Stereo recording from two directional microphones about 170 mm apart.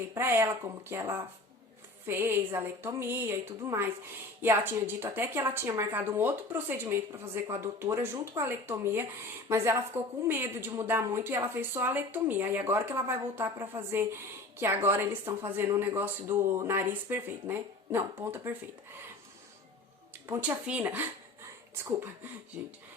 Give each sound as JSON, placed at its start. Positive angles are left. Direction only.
{"t": 0.1, "sound": "a woman's voice", "side_deg": -15}
{"t": 10.2, "sound": "a woman's voice", "side_deg": -15}
{"t": 20.2, "sound": "a woman's voice", "side_deg": -15}